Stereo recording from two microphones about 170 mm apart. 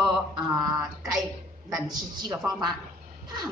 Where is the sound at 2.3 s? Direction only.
5° right (ahead or behind).